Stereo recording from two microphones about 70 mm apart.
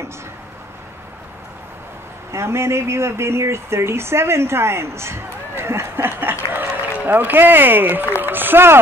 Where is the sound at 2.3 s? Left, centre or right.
Right.